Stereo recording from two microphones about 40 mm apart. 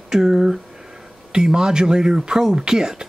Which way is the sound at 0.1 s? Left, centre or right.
Centre.